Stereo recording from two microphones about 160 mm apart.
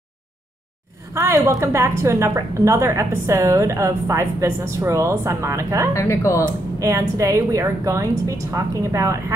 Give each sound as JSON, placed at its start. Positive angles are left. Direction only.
{"t": 1.1, "sound": "a woman's voice", "side_deg": -20}
{"t": 5.9, "sound": "speech", "side_deg": 20}
{"t": 6.8, "sound": "a woman's voice", "side_deg": -20}